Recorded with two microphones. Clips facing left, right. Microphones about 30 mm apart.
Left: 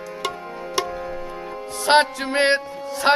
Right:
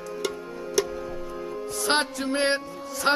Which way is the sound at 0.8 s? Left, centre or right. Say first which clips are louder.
Left 1 dB; left.